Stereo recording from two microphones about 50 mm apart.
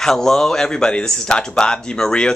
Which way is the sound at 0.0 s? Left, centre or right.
Centre.